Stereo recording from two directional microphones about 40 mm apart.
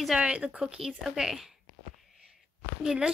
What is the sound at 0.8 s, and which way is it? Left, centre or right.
Speech, centre.